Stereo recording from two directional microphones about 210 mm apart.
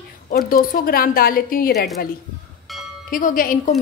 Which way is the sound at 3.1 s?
40° left (ahead or behind).